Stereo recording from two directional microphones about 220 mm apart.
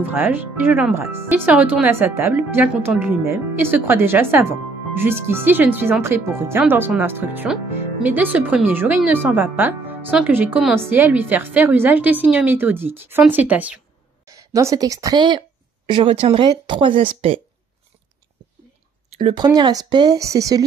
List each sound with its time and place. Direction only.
0.0 s a woman's voice: 10° right (ahead or behind); by 17.4 s 25° right (ahead or behind)
19.1 s speech: 25° right (ahead or behind)